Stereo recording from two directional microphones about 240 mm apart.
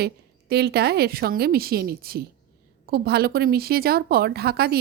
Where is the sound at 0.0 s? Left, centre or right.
Right.